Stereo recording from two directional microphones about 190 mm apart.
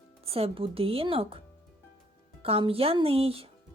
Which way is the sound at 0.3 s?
30° right (ahead or behind).